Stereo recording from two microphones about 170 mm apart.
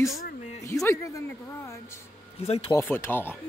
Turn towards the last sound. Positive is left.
turn(degrees=15)  # may be behind; listen again after turning